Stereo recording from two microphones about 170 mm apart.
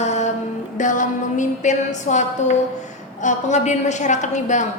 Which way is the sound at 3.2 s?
45° left (ahead or behind).